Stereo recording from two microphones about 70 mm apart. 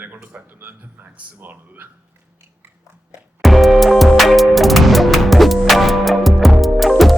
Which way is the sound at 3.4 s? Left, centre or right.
Centre.